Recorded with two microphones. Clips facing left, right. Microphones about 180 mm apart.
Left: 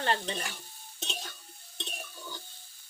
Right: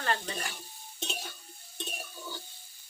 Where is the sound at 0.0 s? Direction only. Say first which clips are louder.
Left 2 dB; 30° left (ahead or behind).